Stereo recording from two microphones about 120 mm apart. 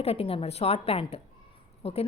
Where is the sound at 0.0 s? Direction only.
55° left (ahead or behind).